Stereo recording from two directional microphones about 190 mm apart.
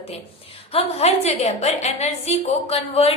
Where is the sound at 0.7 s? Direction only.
35° left (ahead or behind).